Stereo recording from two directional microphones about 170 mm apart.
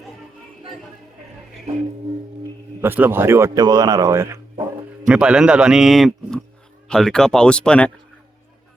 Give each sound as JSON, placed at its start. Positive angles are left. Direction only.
{"t": 2.8, "sound": "speech", "side_deg": -10}
{"t": 5.0, "sound": "a man's voice", "side_deg": -5}